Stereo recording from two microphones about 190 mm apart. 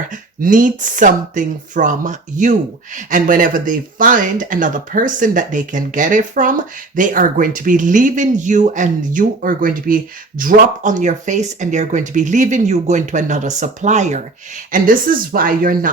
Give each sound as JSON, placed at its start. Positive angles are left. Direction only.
{"t": 0.1, "sound": "speech", "side_deg": -45}